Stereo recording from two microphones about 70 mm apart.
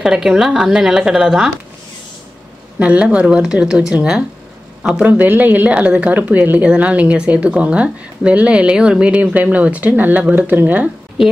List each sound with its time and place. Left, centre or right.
0.0 s speech: centre
2.8 s a woman's voice: centre